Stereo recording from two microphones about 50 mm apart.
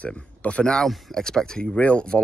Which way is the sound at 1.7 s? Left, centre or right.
Left.